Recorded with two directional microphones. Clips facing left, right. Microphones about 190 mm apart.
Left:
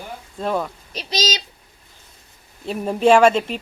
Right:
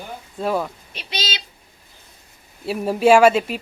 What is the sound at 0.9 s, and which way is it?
Child singing, 40° left (ahead or behind).